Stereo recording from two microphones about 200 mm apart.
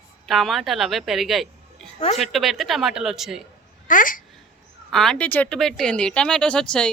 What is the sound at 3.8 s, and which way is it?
Speech, 45° left (ahead or behind).